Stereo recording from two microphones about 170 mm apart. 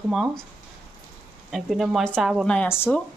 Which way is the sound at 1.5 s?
Centre (ahead or behind).